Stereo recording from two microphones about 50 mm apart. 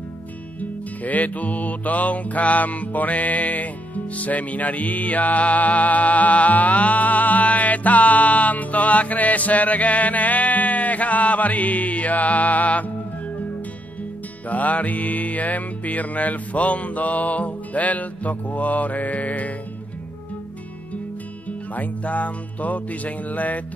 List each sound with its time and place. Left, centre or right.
0.6 s music: left
14.5 s music: left
21.5 s music: left